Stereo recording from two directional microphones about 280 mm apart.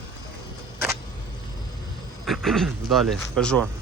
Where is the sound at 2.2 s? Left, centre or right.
Centre.